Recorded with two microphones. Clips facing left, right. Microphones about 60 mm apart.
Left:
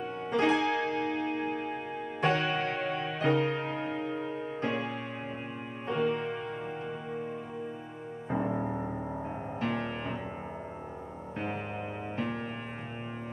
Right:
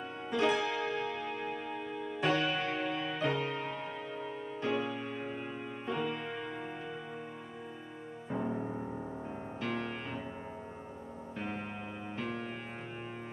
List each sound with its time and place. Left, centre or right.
0.3 s music: left
8.3 s music: left
11.3 s music: left